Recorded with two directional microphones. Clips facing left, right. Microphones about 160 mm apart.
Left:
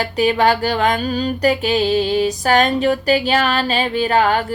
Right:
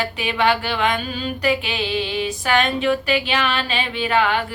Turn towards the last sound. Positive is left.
turn(degrees=40)  # may be behind; listen again after turning